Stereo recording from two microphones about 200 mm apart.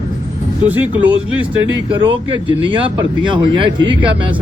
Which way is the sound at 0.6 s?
10° right (ahead or behind).